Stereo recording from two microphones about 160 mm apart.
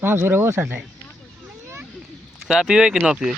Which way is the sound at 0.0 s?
15° right (ahead or behind).